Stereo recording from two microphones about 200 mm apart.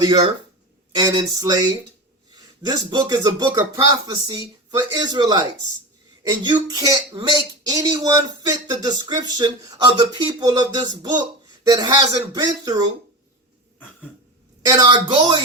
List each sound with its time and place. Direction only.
0.9 s speech: 20° right (ahead or behind)
14.6 s speech: 20° right (ahead or behind)